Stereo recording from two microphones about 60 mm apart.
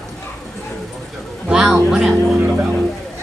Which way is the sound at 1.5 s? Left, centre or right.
Centre.